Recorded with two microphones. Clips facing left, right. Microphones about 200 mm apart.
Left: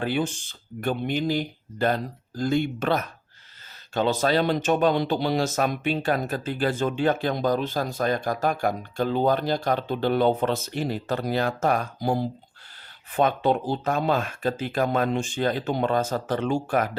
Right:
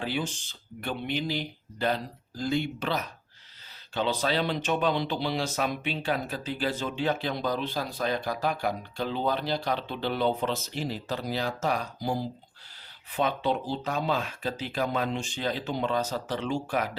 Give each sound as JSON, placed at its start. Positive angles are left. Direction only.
{"t": 0.0, "sound": "speech", "side_deg": 55}